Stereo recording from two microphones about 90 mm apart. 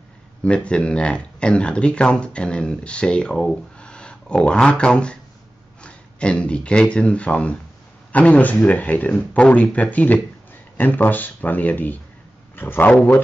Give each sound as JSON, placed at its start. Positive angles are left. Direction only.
{"t": 0.4, "sound": "speech", "side_deg": 10}